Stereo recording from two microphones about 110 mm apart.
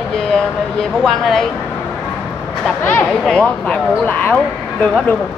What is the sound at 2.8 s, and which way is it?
Speech, 15° left (ahead or behind).